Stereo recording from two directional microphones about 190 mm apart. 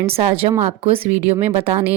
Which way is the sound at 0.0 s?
30° right (ahead or behind).